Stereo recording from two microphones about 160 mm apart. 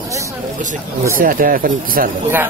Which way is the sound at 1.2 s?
60° right (ahead or behind).